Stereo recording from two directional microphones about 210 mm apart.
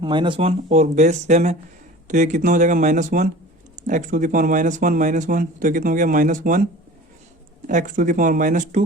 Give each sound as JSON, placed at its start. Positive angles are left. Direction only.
{"t": 0.0, "sound": "speech", "side_deg": -20}
{"t": 7.7, "sound": "speech", "side_deg": -35}